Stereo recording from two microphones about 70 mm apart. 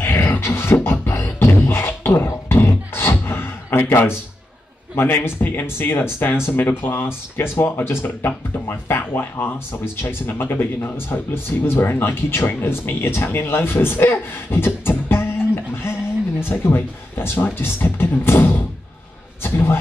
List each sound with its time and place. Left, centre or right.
0.0 s beatboxing: left
4.9 s a man's voice: left